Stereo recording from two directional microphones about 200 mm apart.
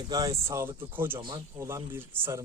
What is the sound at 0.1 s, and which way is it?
Speech, 15° right (ahead or behind).